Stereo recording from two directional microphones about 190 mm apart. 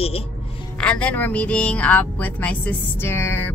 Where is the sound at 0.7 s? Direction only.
5° left (ahead or behind).